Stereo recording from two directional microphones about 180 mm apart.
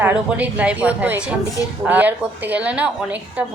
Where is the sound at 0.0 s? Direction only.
10° right (ahead or behind).